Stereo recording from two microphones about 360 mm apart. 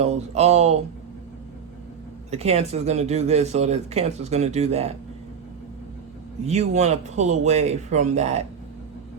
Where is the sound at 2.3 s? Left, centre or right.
Centre.